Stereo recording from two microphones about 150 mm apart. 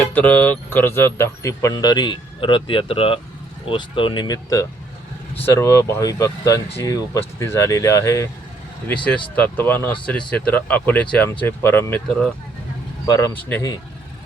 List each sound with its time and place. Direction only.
0.0 s speech: 10° left (ahead or behind)
9.3 s speech: 10° left (ahead or behind)